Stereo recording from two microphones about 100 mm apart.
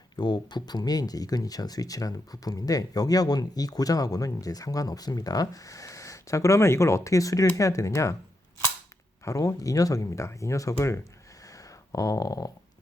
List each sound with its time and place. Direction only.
0.2 s speech: 45° left (ahead or behind)
9.2 s speech: 30° left (ahead or behind)
11.4 s a sound: 35° left (ahead or behind)